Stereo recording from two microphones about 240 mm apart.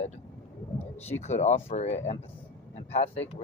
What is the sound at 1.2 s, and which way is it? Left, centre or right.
Speech, left.